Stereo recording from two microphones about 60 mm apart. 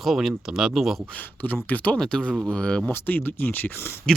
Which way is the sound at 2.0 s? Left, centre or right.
Centre.